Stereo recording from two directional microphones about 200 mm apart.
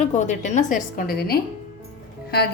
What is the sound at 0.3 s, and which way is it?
A woman's voice, 40° left (ahead or behind).